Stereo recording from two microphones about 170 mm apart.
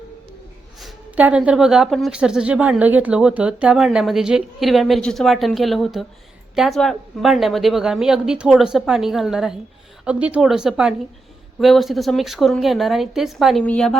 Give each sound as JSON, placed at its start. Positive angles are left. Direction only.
{"t": 0.8, "sound": "speech", "side_deg": -5}